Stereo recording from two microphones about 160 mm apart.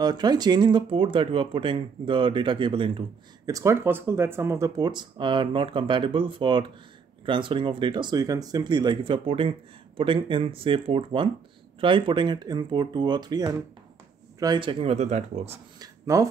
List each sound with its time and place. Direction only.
0.0 s speech: 25° right (ahead or behind)
3.4 s speech: 20° right (ahead or behind); by 15.5 s 45° right (ahead or behind)
15.8 s a sound: 20° right (ahead or behind)